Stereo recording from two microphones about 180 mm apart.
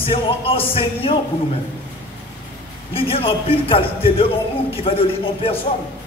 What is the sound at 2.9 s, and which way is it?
A man's voice, 30° left (ahead or behind).